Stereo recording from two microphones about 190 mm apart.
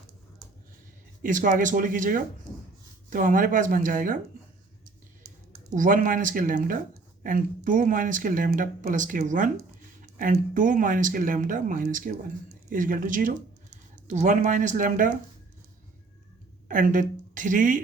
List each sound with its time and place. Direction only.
1.2 s speech: 45° right (ahead or behind)
5.7 s speech: 45° right (ahead or behind)
16.6 s a woman's voice: 45° right (ahead or behind)